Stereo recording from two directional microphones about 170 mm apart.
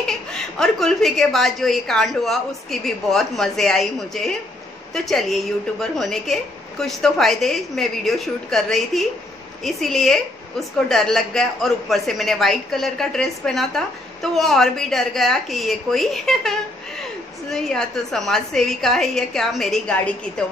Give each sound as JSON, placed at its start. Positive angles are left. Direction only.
{"t": 0.0, "sound": "a man's voice", "side_deg": 5}